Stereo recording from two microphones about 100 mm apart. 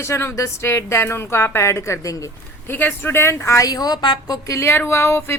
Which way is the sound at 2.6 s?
20° left (ahead or behind).